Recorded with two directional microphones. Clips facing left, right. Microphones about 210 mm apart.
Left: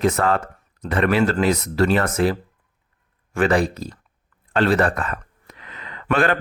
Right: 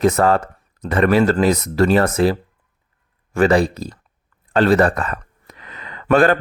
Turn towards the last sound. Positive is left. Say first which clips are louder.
# right 6 dB
turn(degrees=-40)  # may be behind; listen again after turning